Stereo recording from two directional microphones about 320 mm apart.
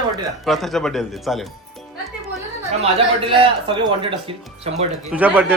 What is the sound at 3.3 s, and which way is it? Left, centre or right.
Speech, centre.